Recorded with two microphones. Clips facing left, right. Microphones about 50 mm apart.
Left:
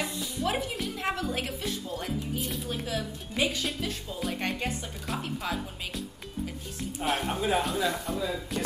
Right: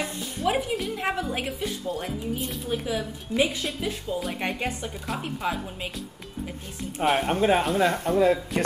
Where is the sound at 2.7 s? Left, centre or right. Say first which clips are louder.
Right 5 dB; centre.